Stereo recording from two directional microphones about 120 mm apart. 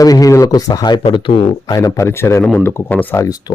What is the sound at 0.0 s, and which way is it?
Speech, 30° left (ahead or behind).